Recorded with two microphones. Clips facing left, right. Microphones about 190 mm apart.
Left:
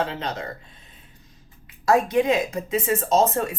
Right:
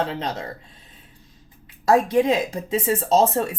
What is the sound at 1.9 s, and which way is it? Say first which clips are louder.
Speech: right 2 dB; 30° right (ahead or behind).